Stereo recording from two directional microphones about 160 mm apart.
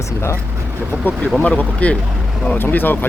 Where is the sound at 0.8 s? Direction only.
10° right (ahead or behind).